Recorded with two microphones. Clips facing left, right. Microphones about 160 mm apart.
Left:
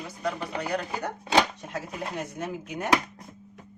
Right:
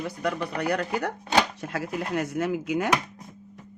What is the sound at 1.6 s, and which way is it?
Chopping, 80° right.